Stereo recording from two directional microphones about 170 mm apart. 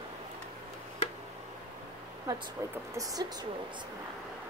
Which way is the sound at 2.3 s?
20° right (ahead or behind).